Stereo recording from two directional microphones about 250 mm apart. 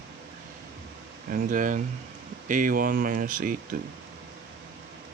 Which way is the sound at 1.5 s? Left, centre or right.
Right.